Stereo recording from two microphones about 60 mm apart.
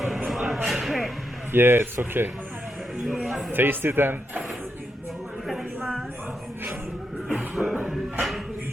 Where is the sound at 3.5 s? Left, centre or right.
Right.